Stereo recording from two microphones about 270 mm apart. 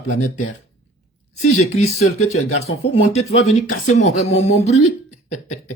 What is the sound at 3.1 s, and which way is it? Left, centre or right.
Speech, left.